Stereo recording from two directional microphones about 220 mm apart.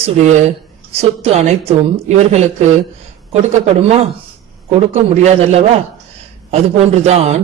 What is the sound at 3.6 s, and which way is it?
A man's voice, 30° right (ahead or behind).